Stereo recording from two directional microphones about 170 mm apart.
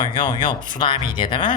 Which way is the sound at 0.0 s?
30° left (ahead or behind).